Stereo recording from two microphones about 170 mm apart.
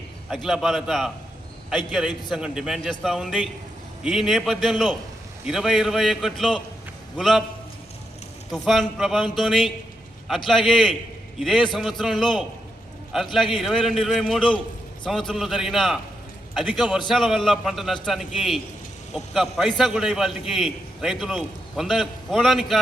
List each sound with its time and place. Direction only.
0.3 s a man's voice: centre (ahead or behind)
8.5 s a man's voice: centre (ahead or behind)